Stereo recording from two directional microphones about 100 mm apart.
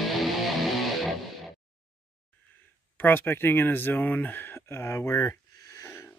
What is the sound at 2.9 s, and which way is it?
Speech, 20° left (ahead or behind).